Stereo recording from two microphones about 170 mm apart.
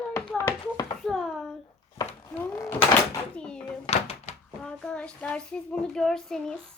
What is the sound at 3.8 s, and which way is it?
Door, 40° left (ahead or behind).